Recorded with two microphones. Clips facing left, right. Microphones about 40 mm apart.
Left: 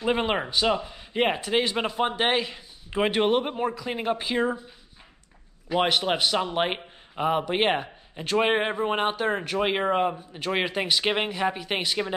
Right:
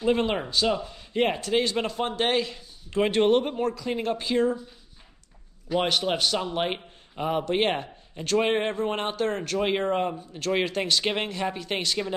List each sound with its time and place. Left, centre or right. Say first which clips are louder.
0.0 s speech: right 1 dB; left
5.7 s speech: left 1 dB; centre